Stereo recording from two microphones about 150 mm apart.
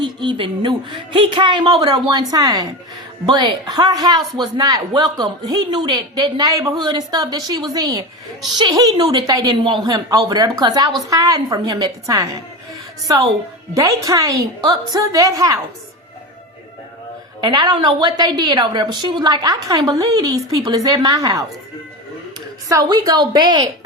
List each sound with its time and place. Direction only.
0.0 s a man's voice: 30° right (ahead or behind)
13.7 s a woman's voice: 20° right (ahead or behind)
17.4 s a woman's voice: 30° right (ahead or behind)
22.7 s a woman's voice: 25° right (ahead or behind)